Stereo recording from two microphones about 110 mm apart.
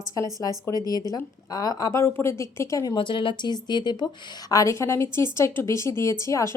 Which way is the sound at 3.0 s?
50° left (ahead or behind).